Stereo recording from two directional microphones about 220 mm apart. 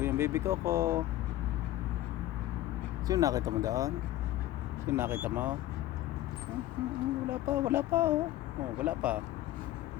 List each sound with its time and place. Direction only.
0.0 s speech: 10° right (ahead or behind)
3.1 s speech: 15° right (ahead or behind)
7.3 s speech: 10° right (ahead or behind)